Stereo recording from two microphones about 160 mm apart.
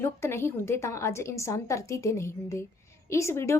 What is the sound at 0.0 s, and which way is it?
A woman's voice, 15° left (ahead or behind).